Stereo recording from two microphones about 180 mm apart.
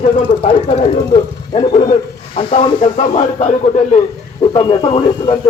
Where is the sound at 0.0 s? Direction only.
30° left (ahead or behind).